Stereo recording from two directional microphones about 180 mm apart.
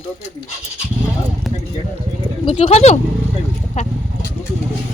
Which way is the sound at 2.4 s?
30° left (ahead or behind).